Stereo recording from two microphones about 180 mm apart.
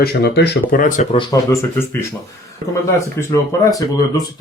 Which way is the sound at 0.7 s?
50° left (ahead or behind).